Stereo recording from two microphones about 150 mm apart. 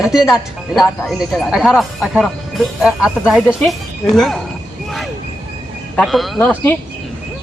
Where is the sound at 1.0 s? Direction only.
Centre (ahead or behind).